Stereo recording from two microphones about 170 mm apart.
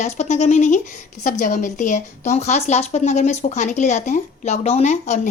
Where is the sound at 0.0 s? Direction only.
40° left (ahead or behind).